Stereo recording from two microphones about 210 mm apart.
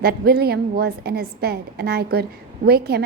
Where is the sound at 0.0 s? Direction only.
45° right (ahead or behind).